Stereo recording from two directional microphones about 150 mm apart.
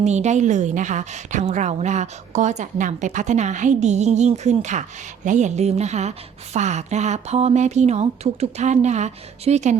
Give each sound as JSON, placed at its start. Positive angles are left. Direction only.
{"t": 0.0, "sound": "a woman's voice", "side_deg": -50}